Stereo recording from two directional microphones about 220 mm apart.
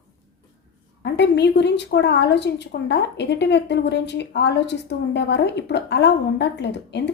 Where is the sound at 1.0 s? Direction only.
50° left (ahead or behind).